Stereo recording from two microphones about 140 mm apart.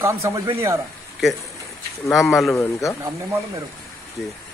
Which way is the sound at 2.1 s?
Centre (ahead or behind).